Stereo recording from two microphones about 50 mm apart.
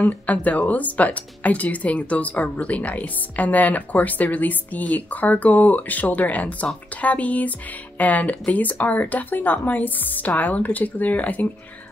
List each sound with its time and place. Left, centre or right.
0.3 s speech: left